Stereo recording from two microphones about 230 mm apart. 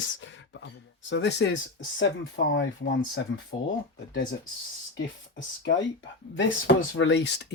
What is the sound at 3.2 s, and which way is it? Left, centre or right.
Speech, left.